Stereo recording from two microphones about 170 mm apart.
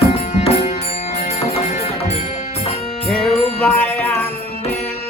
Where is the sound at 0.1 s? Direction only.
40° left (ahead or behind).